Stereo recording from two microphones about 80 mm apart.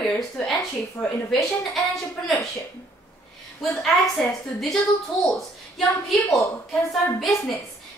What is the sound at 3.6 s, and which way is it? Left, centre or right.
Speech, centre.